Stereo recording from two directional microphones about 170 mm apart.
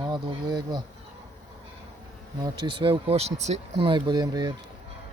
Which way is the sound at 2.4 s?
25° right (ahead or behind).